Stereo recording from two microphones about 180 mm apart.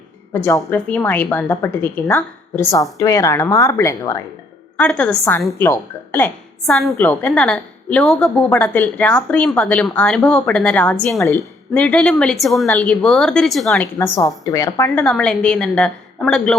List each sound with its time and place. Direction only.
0.3 s a woman's voice: 10° left (ahead or behind)
4.8 s a woman's voice: 5° left (ahead or behind)
14.0 s a woman's voice: 15° left (ahead or behind)
15.0 s speech: 5° left (ahead or behind)